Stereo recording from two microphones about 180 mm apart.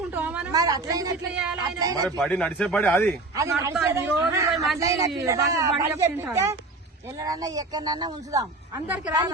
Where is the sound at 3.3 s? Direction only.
15° right (ahead or behind).